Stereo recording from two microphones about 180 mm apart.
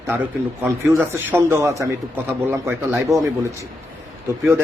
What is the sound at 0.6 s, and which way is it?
A man's voice, 10° right (ahead or behind).